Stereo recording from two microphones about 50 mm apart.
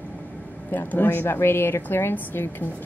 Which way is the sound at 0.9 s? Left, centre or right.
Left.